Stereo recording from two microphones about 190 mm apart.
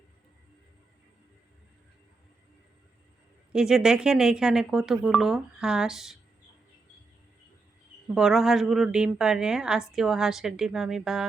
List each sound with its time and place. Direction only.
3.5 s a woman's voice: 5° right (ahead or behind)
8.1 s a woman's voice: centre (ahead or behind)